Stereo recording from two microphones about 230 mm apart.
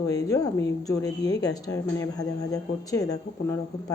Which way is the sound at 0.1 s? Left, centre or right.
Centre.